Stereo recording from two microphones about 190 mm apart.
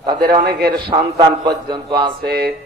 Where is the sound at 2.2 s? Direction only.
55° right (ahead or behind).